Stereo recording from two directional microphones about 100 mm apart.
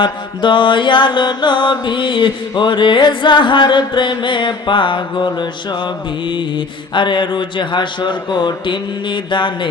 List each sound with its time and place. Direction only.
0.0 s mantra: 50° left (ahead or behind)